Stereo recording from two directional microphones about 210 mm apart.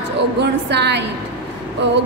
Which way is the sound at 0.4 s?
55° right (ahead or behind).